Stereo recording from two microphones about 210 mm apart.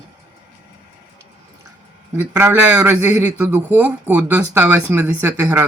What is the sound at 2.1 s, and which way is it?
A man's voice, 10° right (ahead or behind).